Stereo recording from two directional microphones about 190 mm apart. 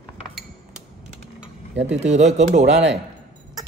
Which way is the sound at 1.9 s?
40° right (ahead or behind).